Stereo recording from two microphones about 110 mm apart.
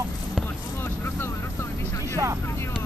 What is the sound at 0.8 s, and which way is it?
Vehicle, 20° left (ahead or behind).